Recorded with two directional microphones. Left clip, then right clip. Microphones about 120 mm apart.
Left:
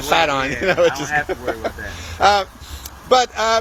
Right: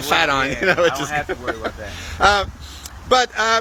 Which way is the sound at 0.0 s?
30° right (ahead or behind).